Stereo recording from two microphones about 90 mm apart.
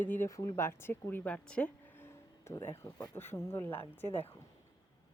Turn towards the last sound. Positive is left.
turn(degrees=25)  # may be behind; listen again after turning